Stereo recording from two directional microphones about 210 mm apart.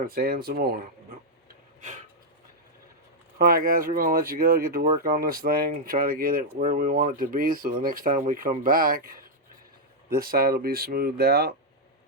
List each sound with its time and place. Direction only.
0.0 s speech: 45° right (ahead or behind)
3.3 s speech: 45° right (ahead or behind)